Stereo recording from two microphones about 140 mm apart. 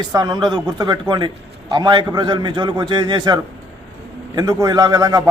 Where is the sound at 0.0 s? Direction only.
30° right (ahead or behind).